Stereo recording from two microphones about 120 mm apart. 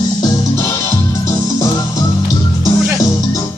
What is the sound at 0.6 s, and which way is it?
Music, 20° left (ahead or behind).